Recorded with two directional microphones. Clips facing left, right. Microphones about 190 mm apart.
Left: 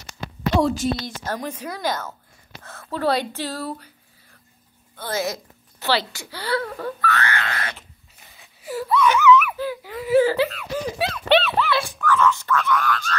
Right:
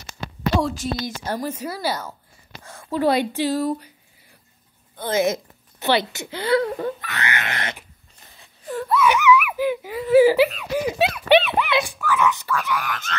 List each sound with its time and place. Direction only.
0.6 s a woman's voice: centre (ahead or behind); by 7.8 s 20° right (ahead or behind)
8.4 s wail: 5° left (ahead or behind)
8.9 s laughter: 10° right (ahead or behind)
10.1 s speech: 10° right (ahead or behind)